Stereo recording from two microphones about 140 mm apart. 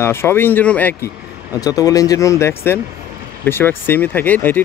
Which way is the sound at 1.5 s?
25° left (ahead or behind).